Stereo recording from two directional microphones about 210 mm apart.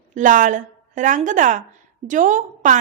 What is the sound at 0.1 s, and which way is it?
A woman's voice, 40° right (ahead or behind).